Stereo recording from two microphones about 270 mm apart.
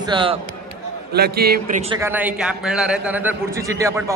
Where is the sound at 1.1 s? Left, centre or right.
Right.